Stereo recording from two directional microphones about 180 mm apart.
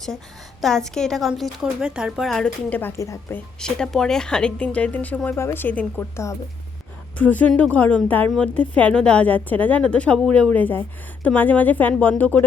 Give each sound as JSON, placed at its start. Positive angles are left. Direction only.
{"t": 0.6, "sound": "speech", "side_deg": 0}
{"t": 3.6, "sound": "a woman's voice", "side_deg": 5}